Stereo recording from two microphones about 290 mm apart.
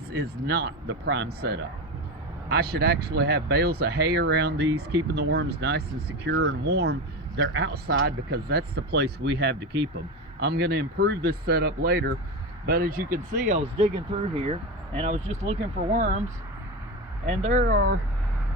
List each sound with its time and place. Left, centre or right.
0.1 s speech: right
17.2 s speech: right